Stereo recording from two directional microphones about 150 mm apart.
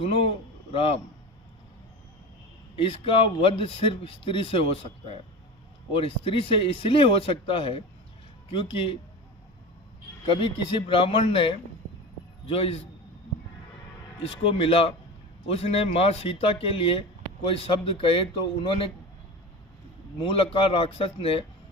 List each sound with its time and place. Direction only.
0.7 s a man's voice: 40° left (ahead or behind)
2.7 s a man's voice: 35° left (ahead or behind)
10.2 s a man's voice: 35° left (ahead or behind)
14.2 s a man's voice: 40° left (ahead or behind)
20.2 s a man's voice: 35° left (ahead or behind)